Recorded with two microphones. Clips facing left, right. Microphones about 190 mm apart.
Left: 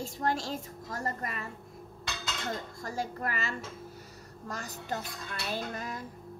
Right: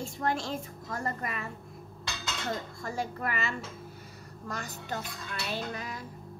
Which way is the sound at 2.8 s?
40° left (ahead or behind).